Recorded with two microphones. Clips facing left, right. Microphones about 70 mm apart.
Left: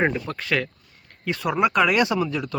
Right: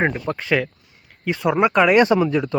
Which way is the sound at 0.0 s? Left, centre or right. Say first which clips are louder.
Right 2 dB; right.